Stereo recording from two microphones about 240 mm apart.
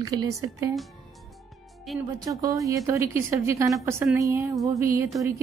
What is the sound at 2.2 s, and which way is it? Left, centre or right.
A woman's voice, centre.